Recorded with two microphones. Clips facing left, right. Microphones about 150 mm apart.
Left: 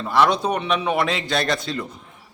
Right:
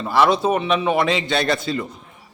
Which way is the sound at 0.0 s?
Centre (ahead or behind).